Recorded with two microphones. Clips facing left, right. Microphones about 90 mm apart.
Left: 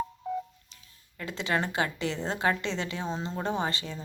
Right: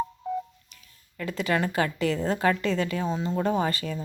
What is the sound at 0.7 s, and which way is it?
A woman's voice, 25° left (ahead or behind).